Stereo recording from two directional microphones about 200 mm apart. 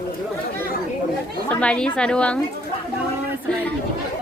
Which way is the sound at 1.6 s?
5° left (ahead or behind).